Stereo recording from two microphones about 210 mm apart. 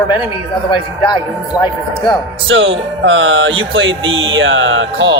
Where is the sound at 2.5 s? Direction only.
65° right (ahead or behind).